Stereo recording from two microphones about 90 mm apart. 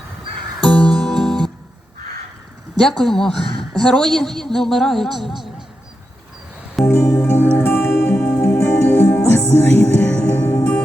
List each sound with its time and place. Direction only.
0.6 s music: 5° left (ahead or behind)
2.8 s a woman's voice: 5° left (ahead or behind)
6.9 s music: 20° left (ahead or behind)
8.4 s music: 15° left (ahead or behind)